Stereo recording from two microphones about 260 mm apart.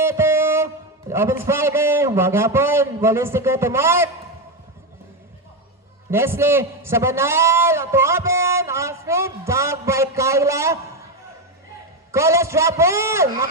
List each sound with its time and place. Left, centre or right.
0.0 s music: centre
1.1 s a man's voice: centre
6.1 s a man's voice: centre
12.1 s a man's voice: centre